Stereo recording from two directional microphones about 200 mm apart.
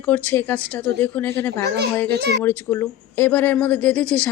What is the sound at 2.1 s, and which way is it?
Speech, 55° right (ahead or behind).